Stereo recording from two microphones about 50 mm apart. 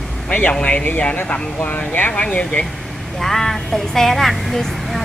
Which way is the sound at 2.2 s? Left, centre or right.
Left.